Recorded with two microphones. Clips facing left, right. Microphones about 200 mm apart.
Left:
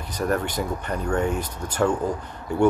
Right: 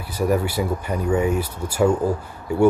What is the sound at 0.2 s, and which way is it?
Speech, 10° right (ahead or behind).